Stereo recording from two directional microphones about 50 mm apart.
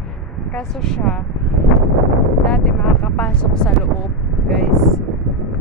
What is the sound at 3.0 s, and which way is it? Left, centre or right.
Speech, left.